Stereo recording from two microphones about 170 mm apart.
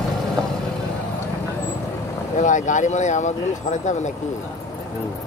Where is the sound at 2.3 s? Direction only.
45° left (ahead or behind).